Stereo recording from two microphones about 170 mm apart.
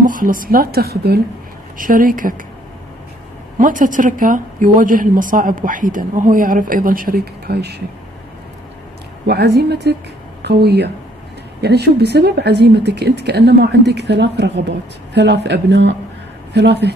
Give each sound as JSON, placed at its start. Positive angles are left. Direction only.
{"t": 0.0, "sound": "a woman's voice", "side_deg": -55}
{"t": 1.8, "sound": "a woman's voice", "side_deg": -55}
{"t": 3.5, "sound": "a woman's voice", "side_deg": -50}
{"t": 7.4, "sound": "speech", "side_deg": -70}
{"t": 9.3, "sound": "speech", "side_deg": -70}